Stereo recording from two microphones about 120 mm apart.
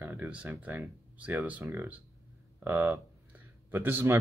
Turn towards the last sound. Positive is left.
turn(degrees=-15)  # may be behind; listen again after turning